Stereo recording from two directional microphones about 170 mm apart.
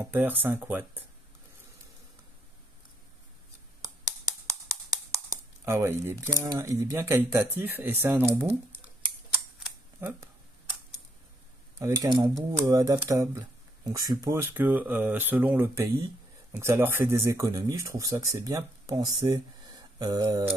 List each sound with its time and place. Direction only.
0.0 s speech: 10° right (ahead or behind)
3.8 s a sound: 20° right (ahead or behind)
7.5 s speech: 10° right (ahead or behind)
9.9 s speech: 15° right (ahead or behind)
11.8 s speech: 20° right (ahead or behind)